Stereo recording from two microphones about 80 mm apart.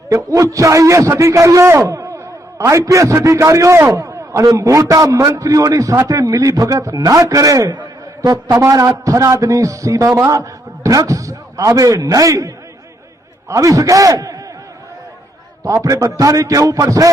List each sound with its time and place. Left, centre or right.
0.3 s a man's voice: right
7.8 s a sound: right
8.5 s a man's voice: right
15.6 s a man's voice: right